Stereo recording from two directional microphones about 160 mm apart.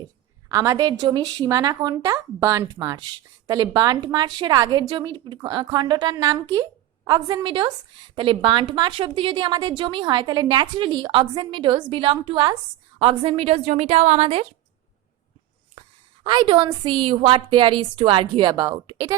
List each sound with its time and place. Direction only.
0.4 s a woman's voice: 20° right (ahead or behind); by 14.4 s 40° right (ahead or behind)
16.2 s a woman's voice: 30° right (ahead or behind)